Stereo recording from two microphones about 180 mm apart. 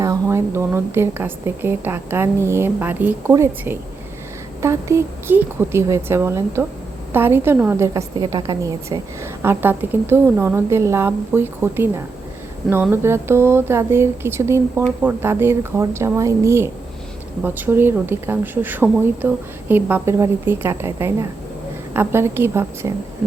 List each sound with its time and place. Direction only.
0.0 s a woman's voice: 15° right (ahead or behind)